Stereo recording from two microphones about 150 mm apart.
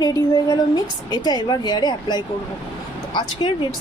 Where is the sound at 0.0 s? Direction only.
25° left (ahead or behind).